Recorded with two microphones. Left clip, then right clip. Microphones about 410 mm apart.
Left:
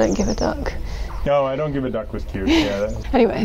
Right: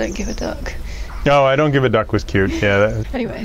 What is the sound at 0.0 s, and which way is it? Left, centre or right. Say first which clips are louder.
Speech: left 4 dB; left.